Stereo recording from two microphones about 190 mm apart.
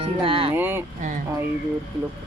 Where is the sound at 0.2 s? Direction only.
30° right (ahead or behind).